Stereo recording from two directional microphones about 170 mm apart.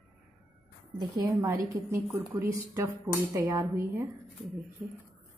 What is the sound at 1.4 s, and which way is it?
Speech, 20° right (ahead or behind).